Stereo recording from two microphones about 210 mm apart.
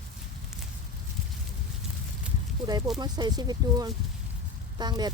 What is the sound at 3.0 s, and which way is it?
Speech, 20° right (ahead or behind).